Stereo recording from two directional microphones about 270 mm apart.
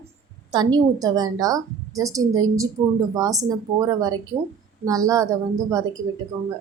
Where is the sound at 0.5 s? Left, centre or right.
Centre.